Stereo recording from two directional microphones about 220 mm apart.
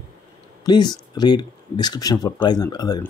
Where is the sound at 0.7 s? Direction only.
20° left (ahead or behind).